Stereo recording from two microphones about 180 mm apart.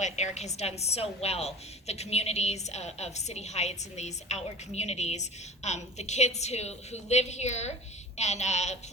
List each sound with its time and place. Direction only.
0.0 s a woman's voice: 40° left (ahead or behind)